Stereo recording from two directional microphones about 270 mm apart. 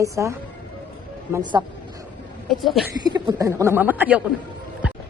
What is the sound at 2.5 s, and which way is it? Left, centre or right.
Speech, centre.